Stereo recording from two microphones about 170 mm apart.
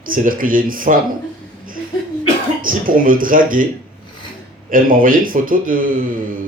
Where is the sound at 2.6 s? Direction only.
55° right (ahead or behind).